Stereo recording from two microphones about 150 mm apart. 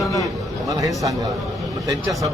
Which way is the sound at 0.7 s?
20° right (ahead or behind).